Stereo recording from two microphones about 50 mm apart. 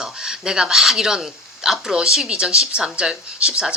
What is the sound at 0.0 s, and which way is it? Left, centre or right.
A woman's voice, centre.